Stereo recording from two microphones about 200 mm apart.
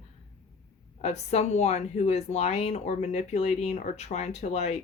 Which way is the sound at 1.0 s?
35° left (ahead or behind).